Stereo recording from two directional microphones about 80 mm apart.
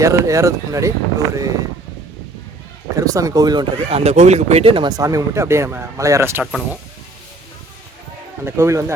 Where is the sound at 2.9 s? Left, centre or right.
Right.